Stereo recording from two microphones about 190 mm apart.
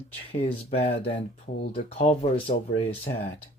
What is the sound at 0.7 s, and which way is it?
Speech, 30° left (ahead or behind).